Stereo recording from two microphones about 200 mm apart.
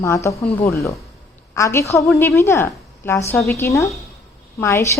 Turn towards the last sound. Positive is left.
turn(degrees=15)  # may be behind; listen again after turning